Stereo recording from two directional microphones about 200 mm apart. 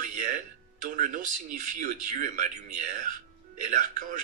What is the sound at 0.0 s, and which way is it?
Music, 40° right (ahead or behind).